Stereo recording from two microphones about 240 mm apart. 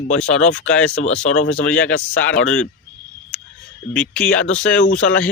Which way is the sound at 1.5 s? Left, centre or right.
Centre.